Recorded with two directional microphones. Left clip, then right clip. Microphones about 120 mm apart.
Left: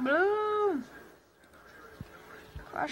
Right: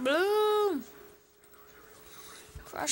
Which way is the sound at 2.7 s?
55° right (ahead or behind).